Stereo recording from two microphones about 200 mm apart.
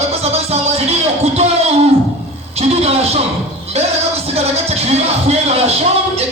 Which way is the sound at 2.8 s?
30° right (ahead or behind).